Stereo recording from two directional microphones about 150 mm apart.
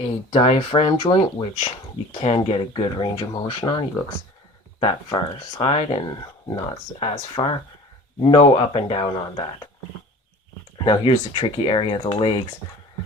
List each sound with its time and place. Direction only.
0.3 s speech: 40° left (ahead or behind)
10.8 s speech: 35° left (ahead or behind)